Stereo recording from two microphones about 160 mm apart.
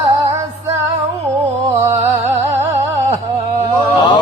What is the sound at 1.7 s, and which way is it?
Music, 15° right (ahead or behind).